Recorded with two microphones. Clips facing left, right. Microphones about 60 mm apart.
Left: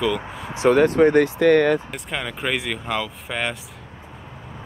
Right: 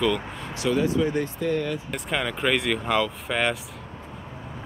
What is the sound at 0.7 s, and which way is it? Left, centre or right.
Speech, left.